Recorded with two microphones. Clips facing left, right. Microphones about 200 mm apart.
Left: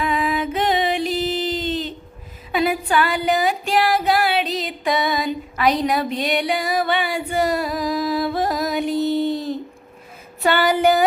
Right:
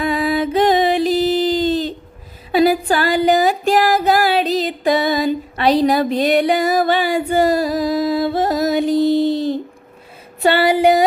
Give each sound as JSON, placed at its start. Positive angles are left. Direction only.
{"t": 0.0, "sound": "music", "side_deg": -35}
{"t": 8.9, "sound": "music", "side_deg": -90}
{"t": 10.4, "sound": "female singing", "side_deg": -30}